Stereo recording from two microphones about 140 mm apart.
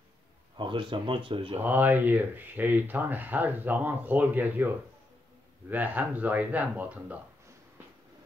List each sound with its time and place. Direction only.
0.6 s speech: 35° right (ahead or behind)
1.6 s speech: 15° right (ahead or behind)